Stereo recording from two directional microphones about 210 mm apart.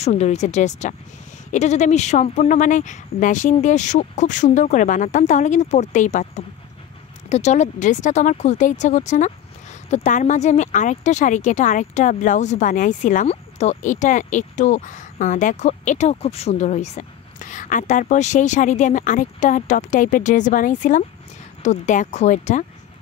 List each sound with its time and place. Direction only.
0.0 s speech: 30° left (ahead or behind)